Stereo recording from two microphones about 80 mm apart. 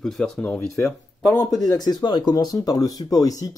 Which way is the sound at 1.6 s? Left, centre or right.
Left.